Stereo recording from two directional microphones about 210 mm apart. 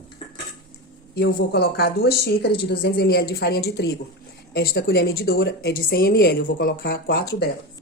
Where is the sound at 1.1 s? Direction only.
50° left (ahead or behind).